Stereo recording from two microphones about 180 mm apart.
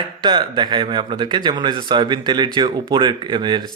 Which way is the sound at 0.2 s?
25° right (ahead or behind).